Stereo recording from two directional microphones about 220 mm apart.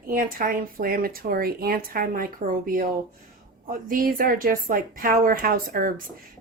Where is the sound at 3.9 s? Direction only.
40° right (ahead or behind).